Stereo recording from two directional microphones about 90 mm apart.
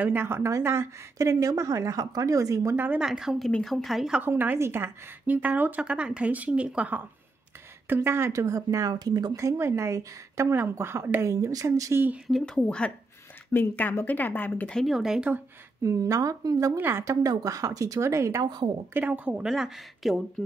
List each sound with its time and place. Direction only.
0.0 s speech: 20° right (ahead or behind)
2.7 s a woman's voice: 20° right (ahead or behind)
3.0 s speech: 5° right (ahead or behind)
4.2 s a woman's voice: 20° right (ahead or behind)
7.9 s speech: 30° right (ahead or behind)
12.3 s speech: 5° left (ahead or behind)
14.8 s speech: 5° right (ahead or behind)
15.8 s speech: 35° right (ahead or behind)
16.7 s a woman's voice: 25° right (ahead or behind)
17.0 s speech: 35° right (ahead or behind)
18.4 s a woman's voice: 50° right (ahead or behind)
18.9 s a woman's voice: 15° right (ahead or behind)
19.4 s speech: 5° right (ahead or behind)